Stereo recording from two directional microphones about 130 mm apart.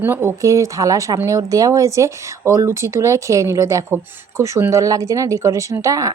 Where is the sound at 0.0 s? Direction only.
20° right (ahead or behind).